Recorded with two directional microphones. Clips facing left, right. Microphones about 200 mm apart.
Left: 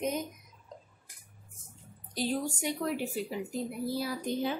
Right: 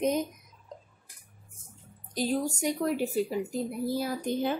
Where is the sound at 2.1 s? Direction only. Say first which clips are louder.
Right 3 dB; 45° right (ahead or behind).